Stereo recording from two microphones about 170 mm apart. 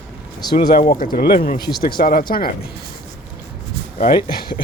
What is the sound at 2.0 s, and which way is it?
Speech, 55° left (ahead or behind).